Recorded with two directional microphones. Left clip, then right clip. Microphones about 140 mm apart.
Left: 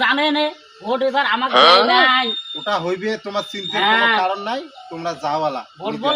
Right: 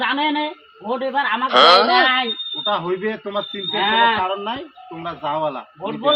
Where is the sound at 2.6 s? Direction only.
50° left (ahead or behind).